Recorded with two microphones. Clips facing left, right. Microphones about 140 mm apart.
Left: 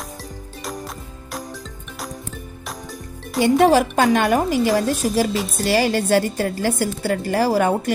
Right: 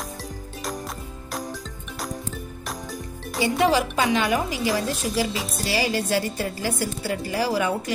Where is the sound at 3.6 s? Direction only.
50° left (ahead or behind).